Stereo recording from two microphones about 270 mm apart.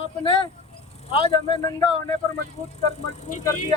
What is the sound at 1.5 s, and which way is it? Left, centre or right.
Speech, centre.